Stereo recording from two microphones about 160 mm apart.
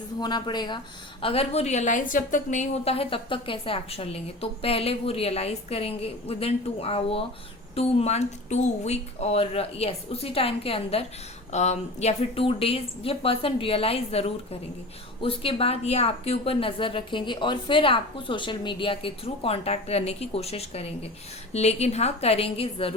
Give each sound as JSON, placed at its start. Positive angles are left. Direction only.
{"t": 0.2, "sound": "a woman's voice", "side_deg": 25}